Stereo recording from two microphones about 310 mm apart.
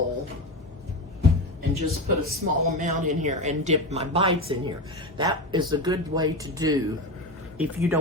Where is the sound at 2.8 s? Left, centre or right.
Right.